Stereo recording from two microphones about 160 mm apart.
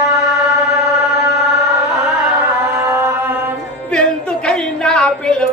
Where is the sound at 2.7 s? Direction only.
20° right (ahead or behind).